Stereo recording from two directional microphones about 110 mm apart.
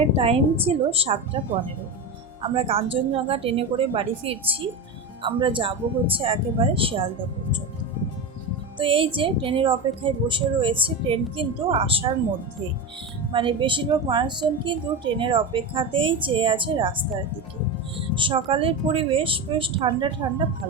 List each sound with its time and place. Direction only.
0.2 s a woman's voice: 60° right (ahead or behind)
2.4 s a woman's voice: 55° right (ahead or behind)
8.8 s speech: 55° right (ahead or behind)
13.3 s speech: 50° right (ahead or behind)